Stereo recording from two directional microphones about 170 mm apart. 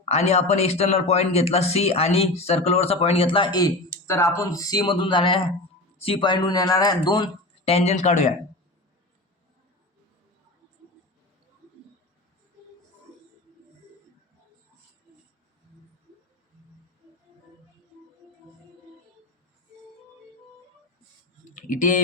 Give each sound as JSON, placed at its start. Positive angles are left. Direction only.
{"t": 0.0, "sound": "a man's voice", "side_deg": 40}
{"t": 21.5, "sound": "typing", "side_deg": 50}